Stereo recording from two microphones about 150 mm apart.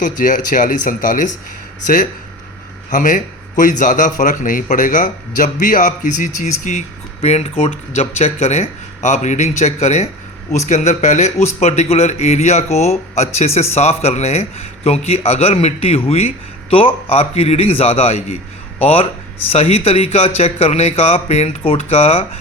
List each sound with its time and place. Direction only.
0.0 s a man's voice: 60° left (ahead or behind)
2.9 s a man's voice: 60° left (ahead or behind); by 22.3 s 40° left (ahead or behind)